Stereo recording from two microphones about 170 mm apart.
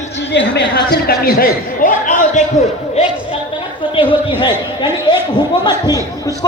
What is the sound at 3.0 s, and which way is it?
A man's voice, 35° left (ahead or behind).